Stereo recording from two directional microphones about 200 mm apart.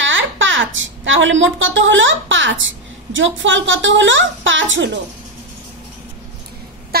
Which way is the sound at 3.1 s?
70° right (ahead or behind).